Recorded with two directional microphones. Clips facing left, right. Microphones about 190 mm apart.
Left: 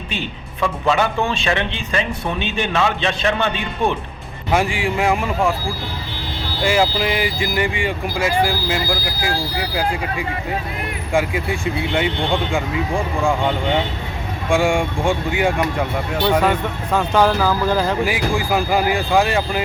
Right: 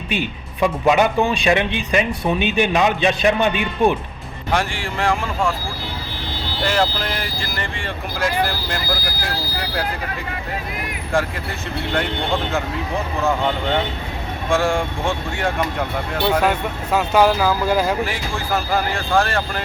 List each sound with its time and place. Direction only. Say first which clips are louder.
0.6 s speech: right 3 dB; 15° right (ahead or behind)
4.5 s speech: left 4 dB; centre (ahead or behind)
5.2 s speech: left 3 dB; 15° left (ahead or behind)
6.7 s speech: left 3 dB; 5° left (ahead or behind)
11.1 s speech: left 3 dB; 5° left (ahead or behind)
14.6 s speech: left 2 dB; centre (ahead or behind)
18.7 s speech: left 2 dB; 15° left (ahead or behind)